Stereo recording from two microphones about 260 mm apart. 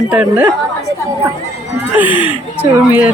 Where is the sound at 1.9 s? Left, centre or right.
Centre.